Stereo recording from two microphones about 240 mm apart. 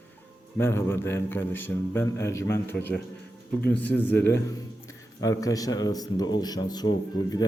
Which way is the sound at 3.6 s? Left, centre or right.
Centre.